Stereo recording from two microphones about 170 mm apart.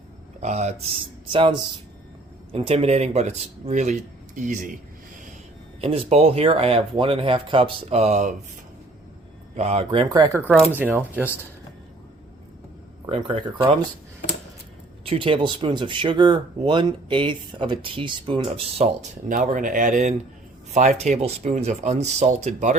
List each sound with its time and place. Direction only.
0.3 s speech: 40° right (ahead or behind)
5.8 s speech: 35° right (ahead or behind)
9.6 s speech: 35° right (ahead or behind); by 11.3 s 10° right (ahead or behind)
13.1 s speech: 30° right (ahead or behind)
15.0 s speech: 35° right (ahead or behind)
19.3 s speech: 50° right (ahead or behind)